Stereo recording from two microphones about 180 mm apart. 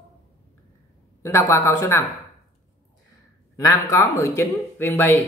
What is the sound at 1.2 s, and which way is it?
Speech, 15° left (ahead or behind).